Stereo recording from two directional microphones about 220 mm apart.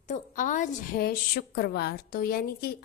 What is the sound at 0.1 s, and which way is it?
Speech, 35° left (ahead or behind).